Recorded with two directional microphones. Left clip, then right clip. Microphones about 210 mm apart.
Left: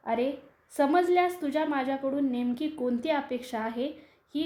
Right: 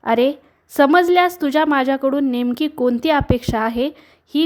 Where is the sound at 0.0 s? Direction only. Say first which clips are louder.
Right 12 dB; 40° right (ahead or behind).